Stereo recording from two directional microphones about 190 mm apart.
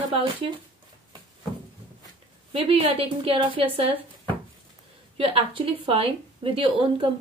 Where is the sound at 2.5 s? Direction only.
30° right (ahead or behind).